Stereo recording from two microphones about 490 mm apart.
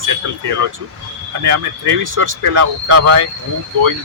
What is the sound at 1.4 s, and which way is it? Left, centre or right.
A man's voice, right.